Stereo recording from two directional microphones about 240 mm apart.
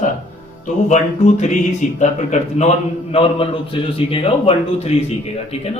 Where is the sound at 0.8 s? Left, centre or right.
Left.